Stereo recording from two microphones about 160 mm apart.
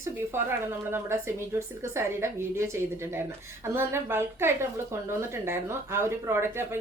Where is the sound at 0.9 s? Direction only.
15° right (ahead or behind).